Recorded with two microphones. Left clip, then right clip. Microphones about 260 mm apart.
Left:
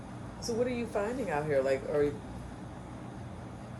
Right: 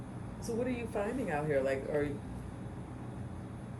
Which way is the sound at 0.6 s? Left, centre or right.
Left.